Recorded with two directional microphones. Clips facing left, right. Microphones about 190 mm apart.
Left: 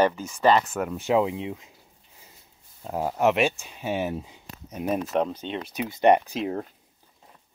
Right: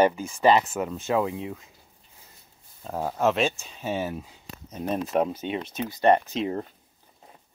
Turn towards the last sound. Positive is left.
turn(degrees=0)  # may be behind; listen again after turning